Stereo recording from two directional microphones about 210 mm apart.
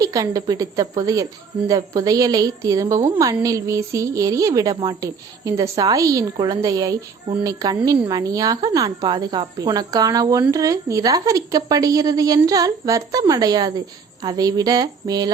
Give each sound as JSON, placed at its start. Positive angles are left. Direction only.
{"t": 0.0, "sound": "speech", "side_deg": -15}